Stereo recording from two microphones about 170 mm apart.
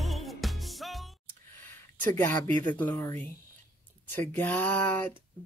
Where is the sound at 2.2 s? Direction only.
10° left (ahead or behind).